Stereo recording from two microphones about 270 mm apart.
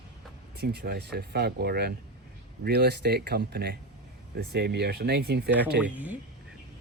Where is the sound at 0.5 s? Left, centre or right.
Right.